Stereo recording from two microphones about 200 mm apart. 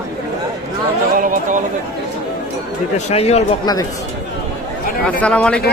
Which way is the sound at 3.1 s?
30° left (ahead or behind).